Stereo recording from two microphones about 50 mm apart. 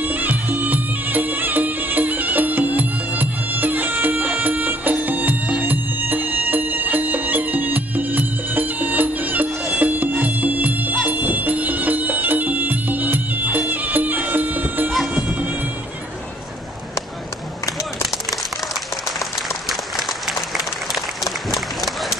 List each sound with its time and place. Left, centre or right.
0.0 s music: right
19.7 s applause: centre